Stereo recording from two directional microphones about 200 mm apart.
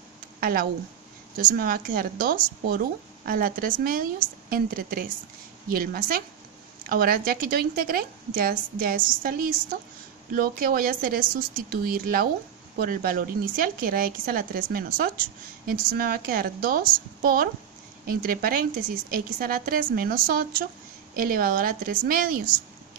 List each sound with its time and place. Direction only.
0.4 s speech: 45° right (ahead or behind)